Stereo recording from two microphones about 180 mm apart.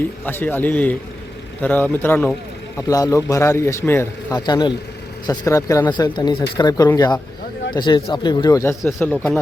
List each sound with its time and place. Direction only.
0.3 s a man's voice: 10° left (ahead or behind)